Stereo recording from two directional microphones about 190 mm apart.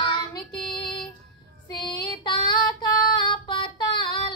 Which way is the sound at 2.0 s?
25° left (ahead or behind).